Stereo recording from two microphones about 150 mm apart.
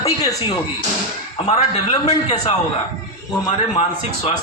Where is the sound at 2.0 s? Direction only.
25° left (ahead or behind).